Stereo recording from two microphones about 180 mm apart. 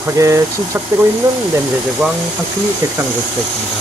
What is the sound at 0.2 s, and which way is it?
Speech, 20° right (ahead or behind).